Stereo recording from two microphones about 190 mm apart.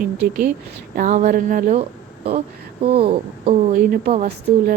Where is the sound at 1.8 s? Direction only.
30° right (ahead or behind).